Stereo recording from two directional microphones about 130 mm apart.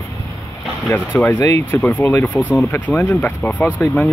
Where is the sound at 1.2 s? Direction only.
20° left (ahead or behind).